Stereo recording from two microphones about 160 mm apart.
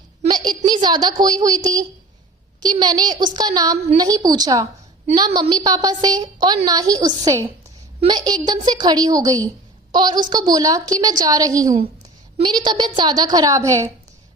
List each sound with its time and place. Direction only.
0.3 s a woman's voice: 25° right (ahead or behind)